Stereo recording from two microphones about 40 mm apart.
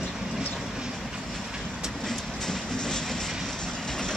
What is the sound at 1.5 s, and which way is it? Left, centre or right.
Train, centre.